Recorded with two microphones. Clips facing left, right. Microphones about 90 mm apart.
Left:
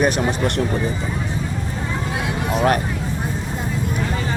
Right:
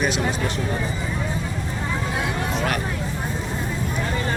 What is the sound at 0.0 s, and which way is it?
Speech, 60° left (ahead or behind).